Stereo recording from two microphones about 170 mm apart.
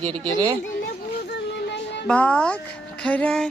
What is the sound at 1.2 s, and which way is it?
Child singing, 85° left.